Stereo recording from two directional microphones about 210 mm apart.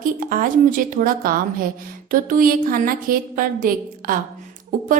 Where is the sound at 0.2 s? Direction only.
40° right (ahead or behind).